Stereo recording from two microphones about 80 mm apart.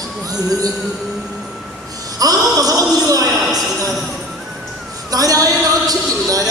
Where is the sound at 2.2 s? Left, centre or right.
Right.